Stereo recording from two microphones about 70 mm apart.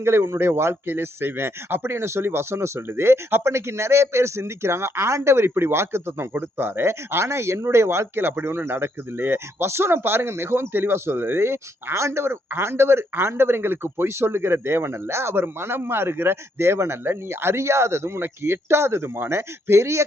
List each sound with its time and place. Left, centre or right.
0.0 s speech: right